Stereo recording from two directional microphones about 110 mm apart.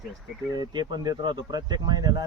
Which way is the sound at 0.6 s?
40° right (ahead or behind).